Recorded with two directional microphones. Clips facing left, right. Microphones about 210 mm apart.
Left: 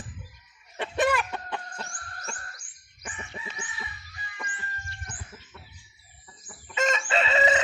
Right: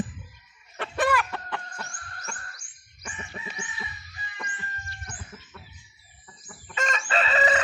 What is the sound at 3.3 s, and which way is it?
Chicken, 10° right (ahead or behind).